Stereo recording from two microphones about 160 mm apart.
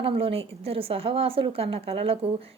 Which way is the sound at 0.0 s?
35° right (ahead or behind).